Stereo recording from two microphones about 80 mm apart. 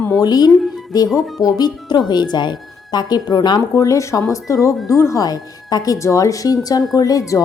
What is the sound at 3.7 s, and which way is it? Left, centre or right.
Speech, left.